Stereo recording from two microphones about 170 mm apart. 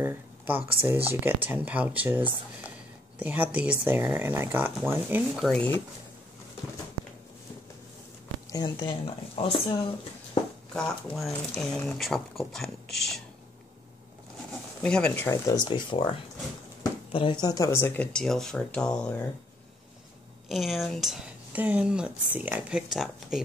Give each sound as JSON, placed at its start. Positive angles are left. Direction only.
{"t": 0.0, "sound": "a sound", "side_deg": -15}
{"t": 0.7, "sound": "speech", "side_deg": -15}
{"t": 5.4, "sound": "speech", "side_deg": 5}
{"t": 8.5, "sound": "speech", "side_deg": 25}
{"t": 10.7, "sound": "speech", "side_deg": 0}
{"t": 14.8, "sound": "speech", "side_deg": 5}
{"t": 15.4, "sound": "speech", "side_deg": 25}
{"t": 17.1, "sound": "speech", "side_deg": 30}
{"t": 20.4, "sound": "speech", "side_deg": 0}